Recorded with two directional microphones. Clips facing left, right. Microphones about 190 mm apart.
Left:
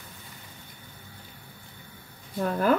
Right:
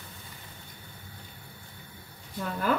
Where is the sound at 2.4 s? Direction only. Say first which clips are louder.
Left 5 dB; 45° left (ahead or behind).